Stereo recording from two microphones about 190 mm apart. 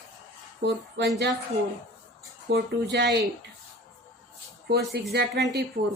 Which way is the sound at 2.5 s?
65° right (ahead or behind).